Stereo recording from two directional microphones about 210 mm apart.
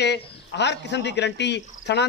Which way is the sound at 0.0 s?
55° left (ahead or behind).